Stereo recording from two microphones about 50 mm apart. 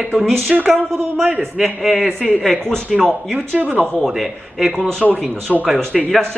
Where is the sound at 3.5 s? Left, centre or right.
Right.